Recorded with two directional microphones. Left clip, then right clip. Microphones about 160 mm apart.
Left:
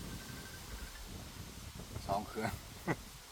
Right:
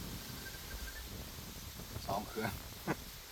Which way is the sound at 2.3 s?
15° left (ahead or behind).